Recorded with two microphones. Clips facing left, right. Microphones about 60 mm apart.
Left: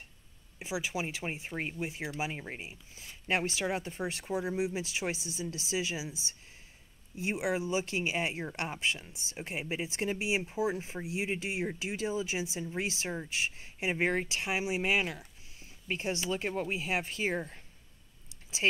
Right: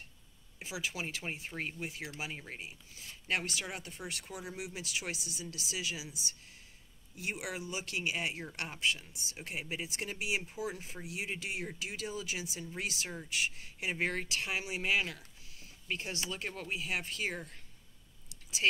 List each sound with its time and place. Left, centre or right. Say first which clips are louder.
0.6 s speech: left 4 dB; left